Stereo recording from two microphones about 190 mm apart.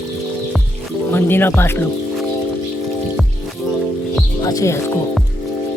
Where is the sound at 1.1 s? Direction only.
10° left (ahead or behind).